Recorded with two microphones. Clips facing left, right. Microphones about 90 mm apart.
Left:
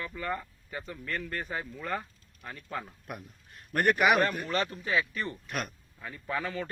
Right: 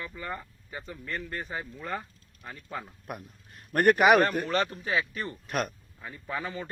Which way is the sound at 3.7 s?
40° right (ahead or behind).